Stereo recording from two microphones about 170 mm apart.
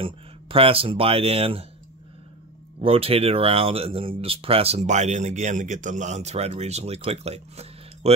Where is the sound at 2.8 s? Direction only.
35° right (ahead or behind).